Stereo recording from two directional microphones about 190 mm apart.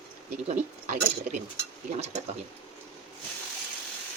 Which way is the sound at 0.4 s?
35° right (ahead or behind).